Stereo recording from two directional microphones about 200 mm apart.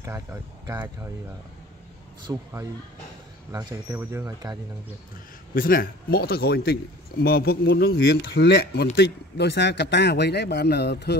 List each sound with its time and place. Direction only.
0.0 s speech: 15° right (ahead or behind)
2.2 s speech: 15° right (ahead or behind)
5.5 s speech: 45° left (ahead or behind)